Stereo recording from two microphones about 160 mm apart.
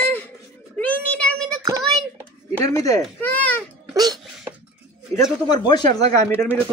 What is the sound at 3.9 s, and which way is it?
Wail, 25° right (ahead or behind).